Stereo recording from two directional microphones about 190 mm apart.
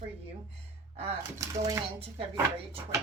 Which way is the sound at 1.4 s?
15° right (ahead or behind).